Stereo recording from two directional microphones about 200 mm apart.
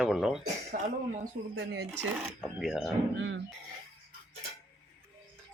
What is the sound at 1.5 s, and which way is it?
Speech, 60° right (ahead or behind).